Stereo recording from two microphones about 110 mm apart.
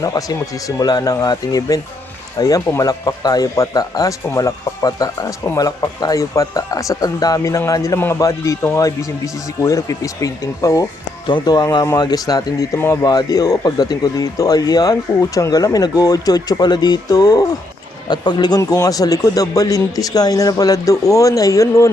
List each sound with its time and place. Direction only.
0.0 s speech: 35° left (ahead or behind)
11.3 s speech: 40° left (ahead or behind)